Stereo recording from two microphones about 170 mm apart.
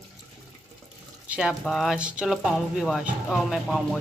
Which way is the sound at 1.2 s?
5° right (ahead or behind).